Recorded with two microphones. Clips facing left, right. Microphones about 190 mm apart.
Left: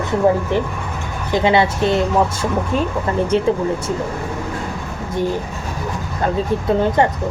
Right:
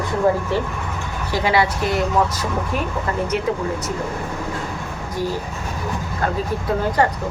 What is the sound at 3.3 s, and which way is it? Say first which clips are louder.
Speech: left 7 dB; 30° left (ahead or behind).